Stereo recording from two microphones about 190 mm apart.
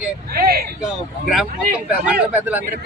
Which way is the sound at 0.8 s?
5° right (ahead or behind).